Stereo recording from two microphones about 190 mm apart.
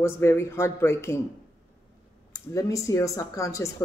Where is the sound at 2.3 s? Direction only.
15° left (ahead or behind).